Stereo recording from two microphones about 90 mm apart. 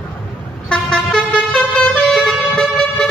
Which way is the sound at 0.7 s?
10° left (ahead or behind).